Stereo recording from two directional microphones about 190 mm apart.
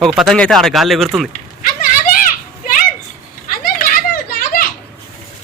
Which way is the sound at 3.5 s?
50° left (ahead or behind).